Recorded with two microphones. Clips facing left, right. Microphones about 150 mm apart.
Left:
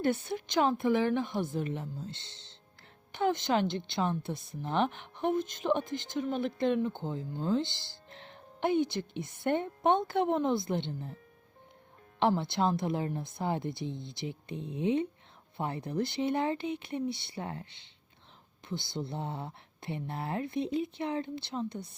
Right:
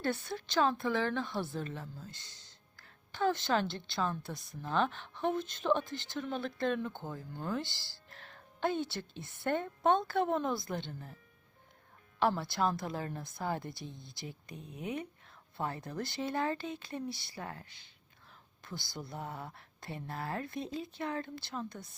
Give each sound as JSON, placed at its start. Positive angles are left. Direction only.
{"t": 0.0, "sound": "speech", "side_deg": 20}
{"t": 12.2, "sound": "speech", "side_deg": 20}